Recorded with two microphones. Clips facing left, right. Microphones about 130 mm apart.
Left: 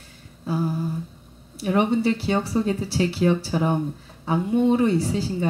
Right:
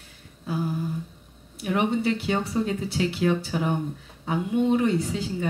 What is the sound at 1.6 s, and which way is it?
Speech, 35° left (ahead or behind).